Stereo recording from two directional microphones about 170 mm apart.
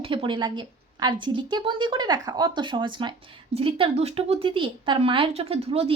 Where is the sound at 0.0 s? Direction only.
30° right (ahead or behind).